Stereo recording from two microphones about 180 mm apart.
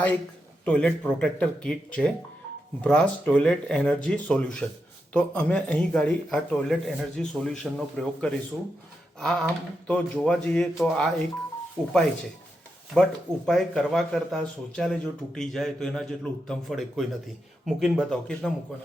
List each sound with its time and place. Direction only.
0.6 s speech: 5° left (ahead or behind)